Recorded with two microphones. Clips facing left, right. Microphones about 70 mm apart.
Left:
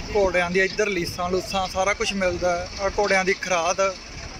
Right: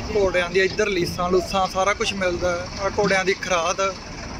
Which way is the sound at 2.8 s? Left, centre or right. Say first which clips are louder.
Right 1 dB; centre.